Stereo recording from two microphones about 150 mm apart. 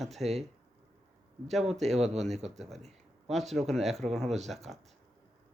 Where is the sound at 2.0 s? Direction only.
45° right (ahead or behind).